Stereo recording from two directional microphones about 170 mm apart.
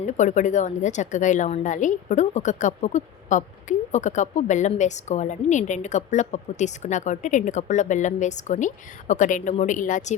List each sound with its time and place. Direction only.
0.0 s a woman's voice: 45° left (ahead or behind)